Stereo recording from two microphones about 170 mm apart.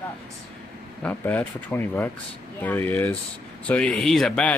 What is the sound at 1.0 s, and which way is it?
A man's voice, 10° left (ahead or behind).